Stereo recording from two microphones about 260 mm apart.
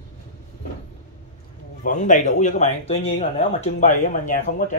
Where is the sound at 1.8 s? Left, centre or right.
Left.